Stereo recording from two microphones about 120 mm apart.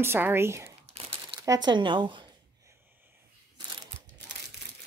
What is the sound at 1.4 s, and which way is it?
Speech, 35° right (ahead or behind).